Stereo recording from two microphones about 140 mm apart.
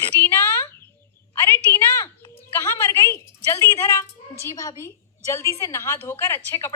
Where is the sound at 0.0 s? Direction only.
15° left (ahead or behind).